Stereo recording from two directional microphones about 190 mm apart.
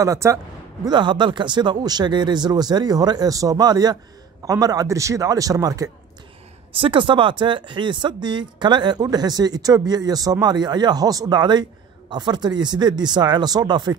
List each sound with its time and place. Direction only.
0.0 s speech: 15° right (ahead or behind)